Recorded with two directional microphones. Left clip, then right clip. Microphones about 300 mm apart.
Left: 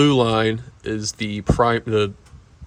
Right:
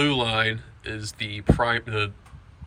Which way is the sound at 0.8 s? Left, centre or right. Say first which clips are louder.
Left 8 dB; centre.